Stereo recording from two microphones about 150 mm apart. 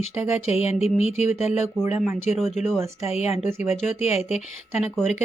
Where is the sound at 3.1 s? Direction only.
45° left (ahead or behind).